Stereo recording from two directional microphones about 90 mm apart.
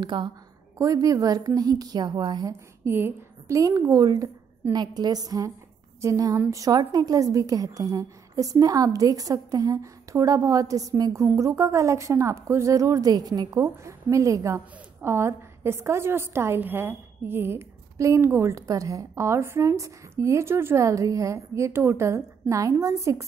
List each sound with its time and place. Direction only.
0.0 s a woman's voice: 60° right (ahead or behind)
0.7 s a woman's voice: 40° right (ahead or behind)
2.4 s a woman's voice: 30° right (ahead or behind)
3.5 s a woman's voice: 40° right (ahead or behind)